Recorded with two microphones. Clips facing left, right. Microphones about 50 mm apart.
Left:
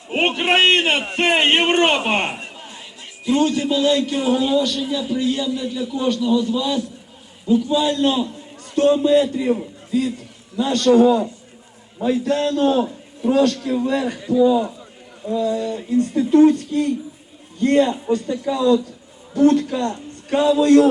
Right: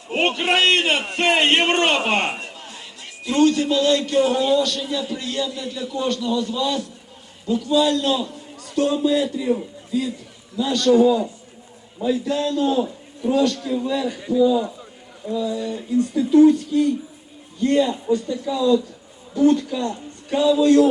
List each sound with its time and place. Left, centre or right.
0.1 s a man's voice: centre
2.4 s chatter: centre
3.2 s a man's voice: centre
8.7 s a man's voice: left
10.8 s a man's voice: left
13.7 s speech: left
15.4 s a man's voice: left